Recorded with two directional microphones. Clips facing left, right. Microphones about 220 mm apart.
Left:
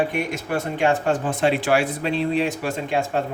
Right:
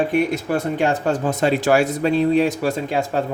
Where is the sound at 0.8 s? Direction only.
40° right (ahead or behind).